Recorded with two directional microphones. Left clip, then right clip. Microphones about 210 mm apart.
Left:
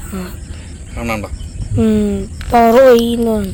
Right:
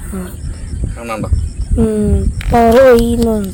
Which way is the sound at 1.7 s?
Centre (ahead or behind).